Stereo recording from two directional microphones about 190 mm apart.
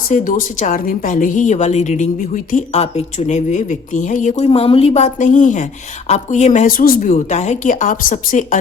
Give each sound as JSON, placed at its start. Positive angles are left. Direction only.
{"t": 0.1, "sound": "a woman's voice", "side_deg": 45}